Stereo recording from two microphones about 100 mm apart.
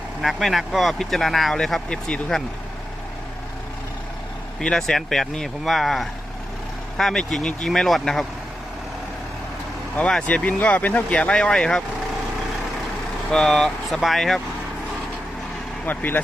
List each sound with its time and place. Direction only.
0.2 s speech: centre (ahead or behind)
4.6 s speech: 5° left (ahead or behind)
10.0 s speech: 10° left (ahead or behind)
13.3 s speech: 5° left (ahead or behind)
15.9 s speech: 20° left (ahead or behind)